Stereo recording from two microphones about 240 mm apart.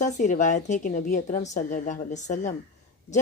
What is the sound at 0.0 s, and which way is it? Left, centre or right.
A woman's voice, left.